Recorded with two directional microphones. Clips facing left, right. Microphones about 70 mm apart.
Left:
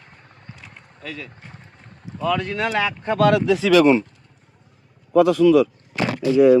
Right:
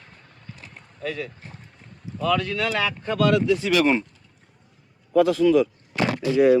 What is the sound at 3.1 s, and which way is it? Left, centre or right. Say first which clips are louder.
Speech: left 3 dB; left.